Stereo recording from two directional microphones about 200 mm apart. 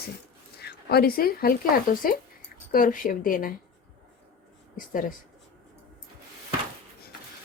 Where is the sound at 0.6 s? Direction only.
50° left (ahead or behind).